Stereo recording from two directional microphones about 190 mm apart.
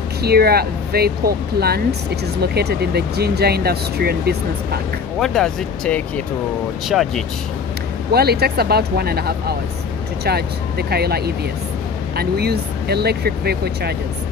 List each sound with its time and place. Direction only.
0.2 s speech: 55° right (ahead or behind)
5.2 s speech: centre (ahead or behind)
8.1 s speech: 55° right (ahead or behind)